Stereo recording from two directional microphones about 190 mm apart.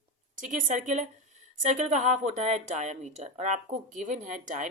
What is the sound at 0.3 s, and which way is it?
Speech, 40° right (ahead or behind).